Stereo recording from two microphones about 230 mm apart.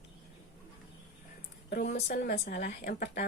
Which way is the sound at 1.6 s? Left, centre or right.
Left.